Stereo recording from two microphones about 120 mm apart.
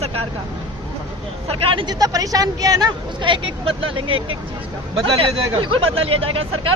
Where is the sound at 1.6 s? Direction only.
45° right (ahead or behind).